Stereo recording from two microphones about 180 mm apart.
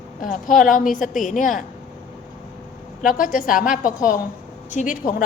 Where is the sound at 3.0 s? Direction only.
50° left (ahead or behind).